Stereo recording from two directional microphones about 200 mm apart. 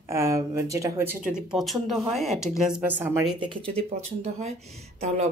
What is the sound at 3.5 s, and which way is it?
Speech, 30° right (ahead or behind).